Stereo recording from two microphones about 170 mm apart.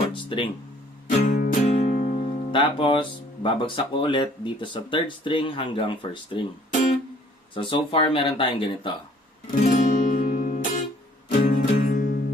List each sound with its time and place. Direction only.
0.1 s guitar: 30° left (ahead or behind)
1.2 s music: 50° left (ahead or behind)
2.5 s speech: 30° left (ahead or behind)
7.5 s speech: 30° left (ahead or behind)
9.5 s music: 50° left (ahead or behind)